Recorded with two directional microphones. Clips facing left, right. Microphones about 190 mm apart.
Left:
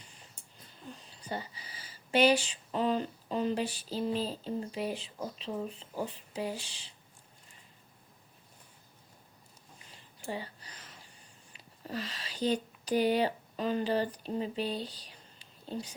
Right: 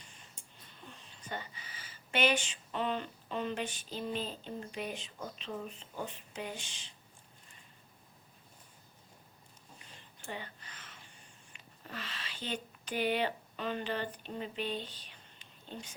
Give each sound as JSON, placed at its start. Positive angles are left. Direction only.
{"t": 0.9, "sound": "speech", "side_deg": 35}
{"t": 10.2, "sound": "a sound", "side_deg": 35}
{"t": 11.8, "sound": "speech", "side_deg": 35}